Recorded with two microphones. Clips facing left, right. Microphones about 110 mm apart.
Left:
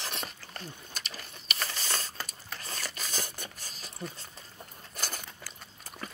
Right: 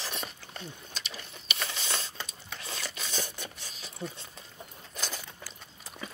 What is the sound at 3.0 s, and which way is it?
Filing, 5° left (ahead or behind).